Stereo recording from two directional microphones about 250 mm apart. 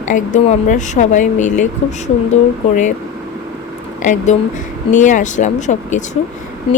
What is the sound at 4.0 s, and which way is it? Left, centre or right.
Speech, left.